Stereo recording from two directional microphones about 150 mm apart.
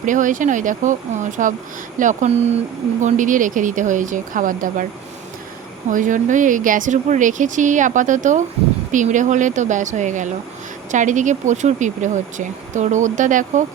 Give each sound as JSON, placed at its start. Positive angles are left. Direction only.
{"t": 0.0, "sound": "speech", "side_deg": -60}
{"t": 3.0, "sound": "speech", "side_deg": -60}
{"t": 5.9, "sound": "speech", "side_deg": -60}